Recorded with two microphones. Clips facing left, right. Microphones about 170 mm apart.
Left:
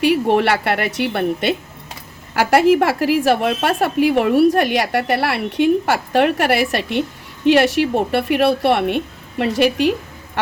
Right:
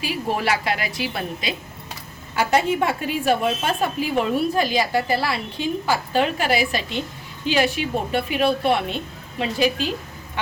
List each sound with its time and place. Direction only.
0.0 s a woman's voice: 70° left (ahead or behind)
2.6 s a woman's voice: 80° left